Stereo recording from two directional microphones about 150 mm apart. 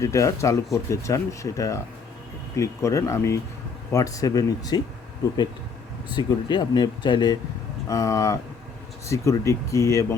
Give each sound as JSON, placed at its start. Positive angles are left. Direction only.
{"t": 0.0, "sound": "speech", "side_deg": 20}
{"t": 6.1, "sound": "speech", "side_deg": 30}